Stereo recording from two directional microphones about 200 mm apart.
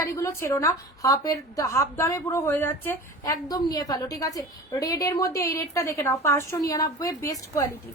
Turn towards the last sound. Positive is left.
turn(degrees=15)  # may be behind; listen again after turning